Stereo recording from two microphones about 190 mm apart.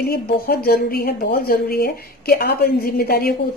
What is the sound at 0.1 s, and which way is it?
A woman's voice, 55° left (ahead or behind).